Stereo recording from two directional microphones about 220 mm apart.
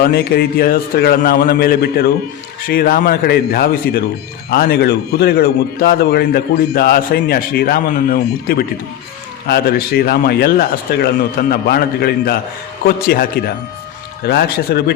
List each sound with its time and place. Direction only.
0.0 s a man's voice: 45° left (ahead or behind)
14.3 s a man's voice: 45° left (ahead or behind)